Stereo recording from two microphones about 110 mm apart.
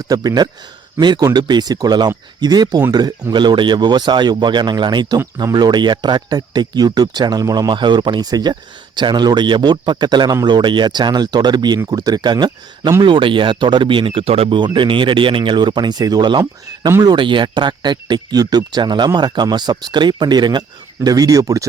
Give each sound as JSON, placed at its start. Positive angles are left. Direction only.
{"t": 0.1, "sound": "speech", "side_deg": -35}
{"t": 14.6, "sound": "speech", "side_deg": -45}